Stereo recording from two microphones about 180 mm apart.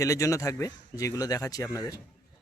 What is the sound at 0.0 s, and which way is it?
Speech, 15° left (ahead or behind).